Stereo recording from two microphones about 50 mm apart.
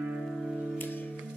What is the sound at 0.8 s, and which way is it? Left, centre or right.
Music, left.